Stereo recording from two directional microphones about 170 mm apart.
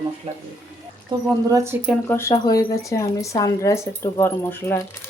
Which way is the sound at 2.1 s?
15° left (ahead or behind).